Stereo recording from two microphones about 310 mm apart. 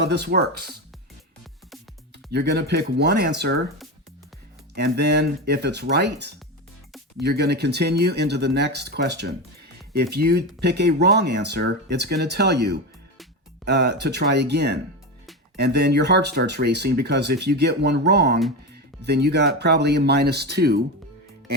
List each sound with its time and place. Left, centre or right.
0.0 s speech: right
2.3 s speech: right
4.7 s speech: right